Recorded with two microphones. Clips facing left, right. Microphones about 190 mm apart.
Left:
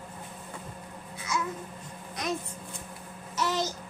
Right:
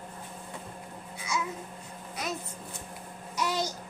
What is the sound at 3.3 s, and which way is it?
Babbling, 10° right (ahead or behind).